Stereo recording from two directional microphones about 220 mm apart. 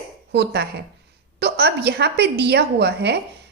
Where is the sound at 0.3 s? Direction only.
50° right (ahead or behind).